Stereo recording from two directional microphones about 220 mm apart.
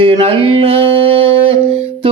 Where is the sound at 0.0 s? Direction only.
25° right (ahead or behind).